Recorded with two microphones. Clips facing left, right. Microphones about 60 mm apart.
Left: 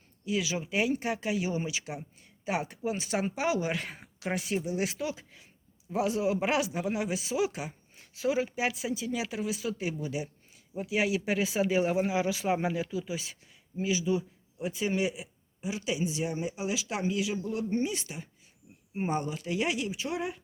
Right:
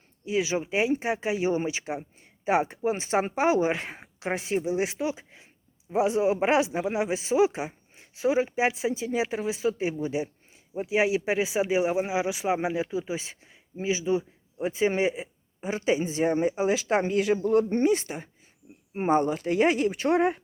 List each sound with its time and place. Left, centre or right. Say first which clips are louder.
0.3 s speech: right 5 dB; right